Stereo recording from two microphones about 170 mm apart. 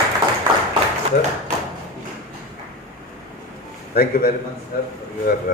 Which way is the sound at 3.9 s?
60° left (ahead or behind).